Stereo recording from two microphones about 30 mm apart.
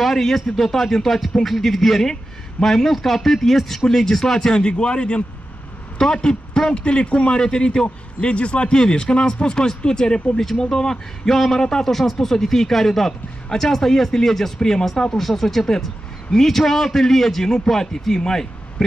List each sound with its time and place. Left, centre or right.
0.0 s a man's voice: centre
3.9 s speech: left
4.6 s a man's voice: left
5.9 s a man's voice: left
6.7 s a man's voice: left
7.2 s a man's voice: left
11.2 s a man's voice: centre
15.1 s a man's voice: centre